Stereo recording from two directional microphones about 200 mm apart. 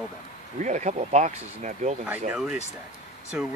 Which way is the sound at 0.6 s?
35° right (ahead or behind).